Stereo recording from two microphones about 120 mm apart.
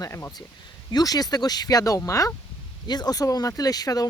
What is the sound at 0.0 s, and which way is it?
Speech, 25° left (ahead or behind).